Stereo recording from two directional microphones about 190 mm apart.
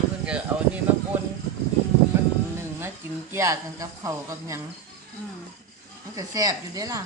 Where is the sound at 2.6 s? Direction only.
10° right (ahead or behind).